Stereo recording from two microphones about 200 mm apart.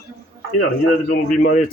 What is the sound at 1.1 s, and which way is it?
Speech, 40° left (ahead or behind).